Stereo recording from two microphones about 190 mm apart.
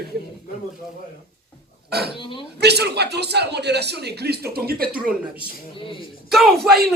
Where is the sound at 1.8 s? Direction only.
55° right (ahead or behind).